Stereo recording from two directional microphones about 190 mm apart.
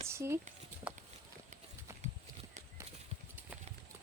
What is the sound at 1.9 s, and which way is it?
Horse, 15° right (ahead or behind).